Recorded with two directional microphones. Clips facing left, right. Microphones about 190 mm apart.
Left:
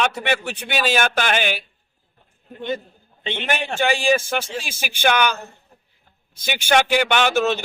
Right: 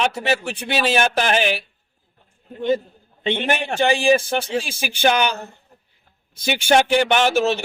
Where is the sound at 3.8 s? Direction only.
30° right (ahead or behind).